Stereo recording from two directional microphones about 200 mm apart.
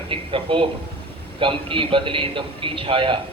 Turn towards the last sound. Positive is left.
turn(degrees=-25)  # may be behind; listen again after turning